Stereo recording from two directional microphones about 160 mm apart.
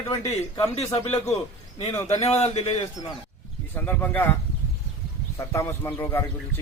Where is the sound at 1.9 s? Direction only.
20° left (ahead or behind).